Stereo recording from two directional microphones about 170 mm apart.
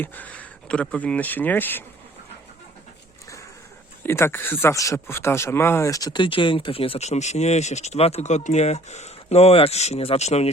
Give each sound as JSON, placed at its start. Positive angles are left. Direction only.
{"t": 0.0, "sound": "speech", "side_deg": 10}
{"t": 4.0, "sound": "speech", "side_deg": 15}